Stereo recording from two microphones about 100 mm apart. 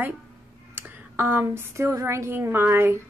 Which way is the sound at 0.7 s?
20° right (ahead or behind).